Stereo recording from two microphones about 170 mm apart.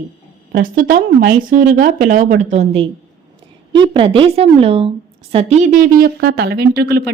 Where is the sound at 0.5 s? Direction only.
55° right (ahead or behind).